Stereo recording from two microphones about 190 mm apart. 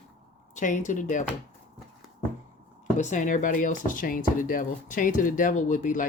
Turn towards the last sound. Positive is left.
turn(degrees=45)  # may be behind; listen again after turning